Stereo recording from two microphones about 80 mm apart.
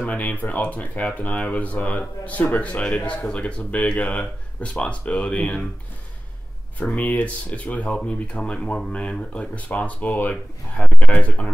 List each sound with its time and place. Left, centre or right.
0.0 s speech: centre
7.0 s speech: centre